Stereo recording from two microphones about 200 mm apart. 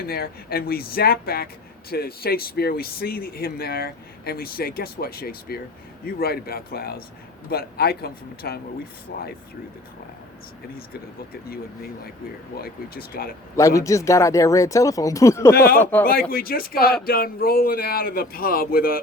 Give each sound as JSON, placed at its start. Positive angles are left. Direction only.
{"t": 0.0, "sound": "speech", "side_deg": 50}
{"t": 12.5, "sound": "speech", "side_deg": 50}
{"t": 13.6, "sound": "speech", "side_deg": 15}
{"t": 15.5, "sound": "speech", "side_deg": 50}
{"t": 15.8, "sound": "speech", "side_deg": 10}
{"t": 16.3, "sound": "speech", "side_deg": 45}